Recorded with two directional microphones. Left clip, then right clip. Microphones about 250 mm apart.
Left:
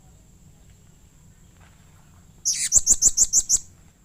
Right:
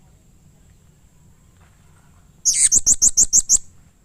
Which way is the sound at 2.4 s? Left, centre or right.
Right.